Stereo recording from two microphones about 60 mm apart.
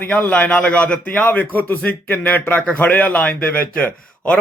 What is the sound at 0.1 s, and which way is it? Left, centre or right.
A man's voice, left.